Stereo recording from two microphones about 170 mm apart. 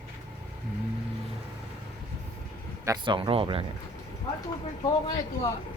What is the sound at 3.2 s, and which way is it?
Speech, 30° right (ahead or behind).